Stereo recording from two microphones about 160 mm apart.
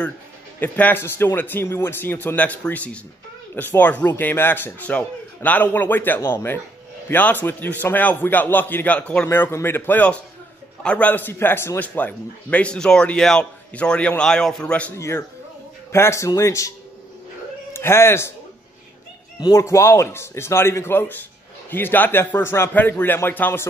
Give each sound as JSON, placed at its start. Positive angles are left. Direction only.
{"t": 0.6, "sound": "a man's voice", "side_deg": 10}
{"t": 17.7, "sound": "a man's voice", "side_deg": 15}
{"t": 19.4, "sound": "a man's voice", "side_deg": 20}